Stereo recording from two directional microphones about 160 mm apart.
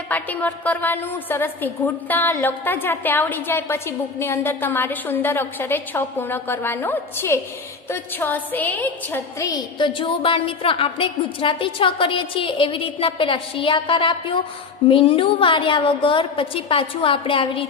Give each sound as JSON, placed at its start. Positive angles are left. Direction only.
{"t": 0.1, "sound": "a woman's voice", "side_deg": 10}
{"t": 9.4, "sound": "a woman's voice", "side_deg": 25}